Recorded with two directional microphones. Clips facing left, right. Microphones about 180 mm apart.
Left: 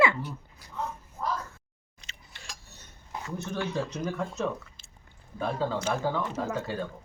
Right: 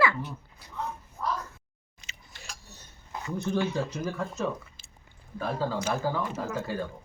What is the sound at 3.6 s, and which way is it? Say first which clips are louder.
Speech: left 1 dB; 5° right (ahead or behind).